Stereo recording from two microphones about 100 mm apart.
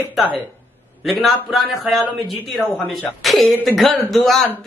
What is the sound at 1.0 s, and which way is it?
Speech, centre (ahead or behind).